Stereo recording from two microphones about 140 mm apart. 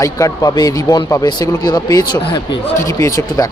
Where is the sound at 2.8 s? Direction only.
20° left (ahead or behind).